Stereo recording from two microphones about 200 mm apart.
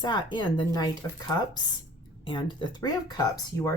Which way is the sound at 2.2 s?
25° left (ahead or behind).